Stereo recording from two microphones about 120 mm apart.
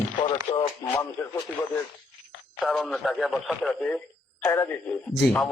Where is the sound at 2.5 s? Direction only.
Centre (ahead or behind); by 4.8 s 15° left (ahead or behind).